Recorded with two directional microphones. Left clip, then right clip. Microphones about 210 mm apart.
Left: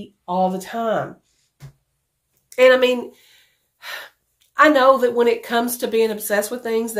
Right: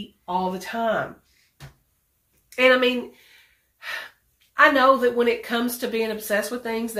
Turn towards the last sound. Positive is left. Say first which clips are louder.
# left 5 dB
turn(degrees=50)  # may be behind; listen again after turning